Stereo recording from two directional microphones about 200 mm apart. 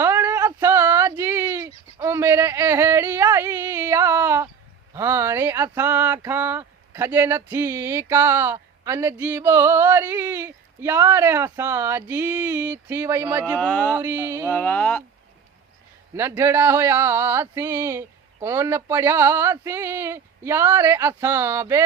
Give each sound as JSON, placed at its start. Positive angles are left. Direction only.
{"t": 0.0, "sound": "a sound", "side_deg": -10}
{"t": 4.9, "sound": "speech", "side_deg": -15}
{"t": 13.6, "sound": "speech", "side_deg": 5}
{"t": 14.0, "sound": "speech", "side_deg": -10}
{"t": 14.5, "sound": "speech", "side_deg": 10}
{"t": 16.1, "sound": "speech", "side_deg": -10}